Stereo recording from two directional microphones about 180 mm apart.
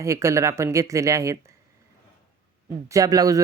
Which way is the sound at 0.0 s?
15° right (ahead or behind).